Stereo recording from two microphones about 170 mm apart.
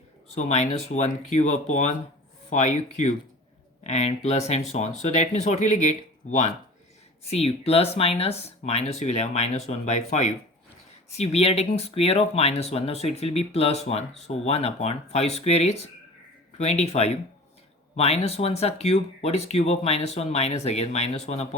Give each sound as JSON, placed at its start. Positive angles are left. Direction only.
{"t": 0.3, "sound": "speech", "side_deg": 40}